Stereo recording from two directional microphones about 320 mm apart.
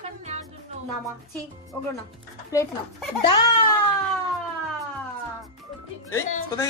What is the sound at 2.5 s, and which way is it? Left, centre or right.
Speech, centre.